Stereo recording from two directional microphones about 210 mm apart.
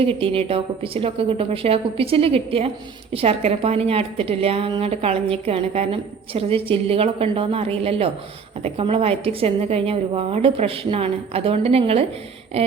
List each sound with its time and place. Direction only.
0.0 s speech: 25° right (ahead or behind)